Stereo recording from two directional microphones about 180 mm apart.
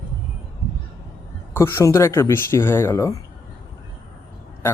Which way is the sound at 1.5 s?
15° left (ahead or behind).